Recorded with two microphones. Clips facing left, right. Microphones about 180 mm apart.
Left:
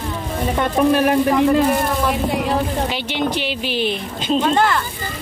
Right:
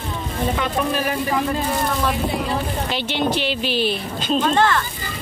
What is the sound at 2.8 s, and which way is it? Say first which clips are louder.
Speech: even; 15° left (ahead or behind).